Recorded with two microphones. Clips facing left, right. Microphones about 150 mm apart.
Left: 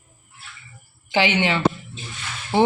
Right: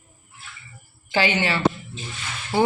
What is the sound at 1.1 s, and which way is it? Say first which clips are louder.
Speech: left 2 dB; 15° left (ahead or behind).